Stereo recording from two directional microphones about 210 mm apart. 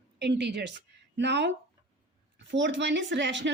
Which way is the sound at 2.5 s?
60° right (ahead or behind).